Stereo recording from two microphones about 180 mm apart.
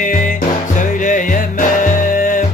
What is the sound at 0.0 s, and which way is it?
Music, 45° left (ahead or behind).